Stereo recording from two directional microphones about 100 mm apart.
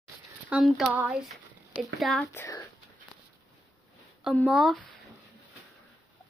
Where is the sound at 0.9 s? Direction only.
15° right (ahead or behind).